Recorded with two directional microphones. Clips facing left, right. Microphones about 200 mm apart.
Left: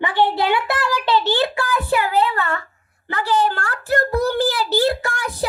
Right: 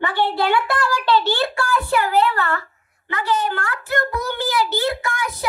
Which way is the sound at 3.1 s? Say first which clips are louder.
Left 2 dB; 30° left (ahead or behind).